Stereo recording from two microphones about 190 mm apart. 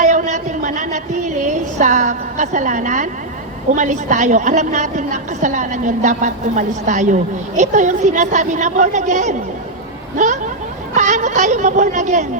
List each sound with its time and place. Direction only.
0.0 s a sound: 40° right (ahead or behind)
3.7 s a woman's voice: 40° right (ahead or behind)
10.9 s a woman's voice: 40° right (ahead or behind)